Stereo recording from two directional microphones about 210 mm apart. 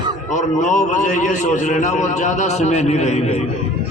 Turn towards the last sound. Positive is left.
turn(degrees=30)  # may be behind; listen again after turning